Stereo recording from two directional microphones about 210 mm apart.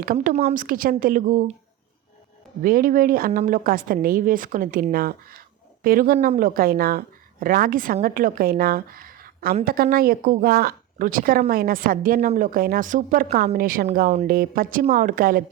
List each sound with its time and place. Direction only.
0.0 s a woman's voice: 40° right (ahead or behind)
2.6 s a woman's voice: 45° right (ahead or behind)